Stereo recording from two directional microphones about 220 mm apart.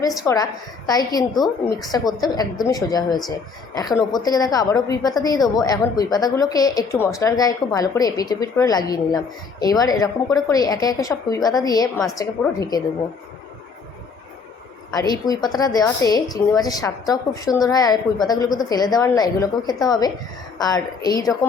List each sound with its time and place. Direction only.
0.3 s a woman's voice: 10° left (ahead or behind)
14.9 s a woman's voice: 15° left (ahead or behind)